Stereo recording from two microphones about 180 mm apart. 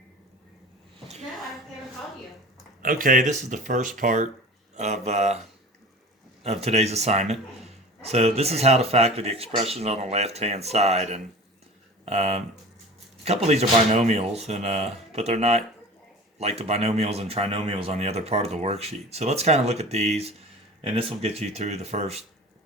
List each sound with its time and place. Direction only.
0.9 s a sound: 35° right (ahead or behind)
2.8 s speech: 50° right (ahead or behind)
6.4 s speech: 35° right (ahead or behind)